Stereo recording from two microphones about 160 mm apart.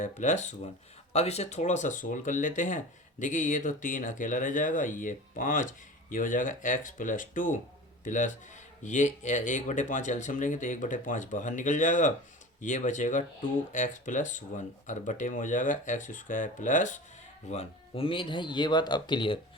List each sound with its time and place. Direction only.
0.0 s speech: 50° left (ahead or behind)
17.5 s speech: 40° left (ahead or behind)